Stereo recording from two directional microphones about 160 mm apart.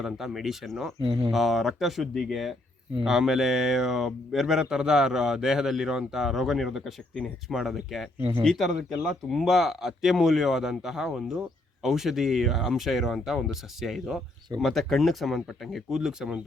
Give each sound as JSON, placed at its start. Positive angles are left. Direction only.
{"t": 0.0, "sound": "speech", "side_deg": 0}
{"t": 1.0, "sound": "speech", "side_deg": -30}
{"t": 1.3, "sound": "speech", "side_deg": 0}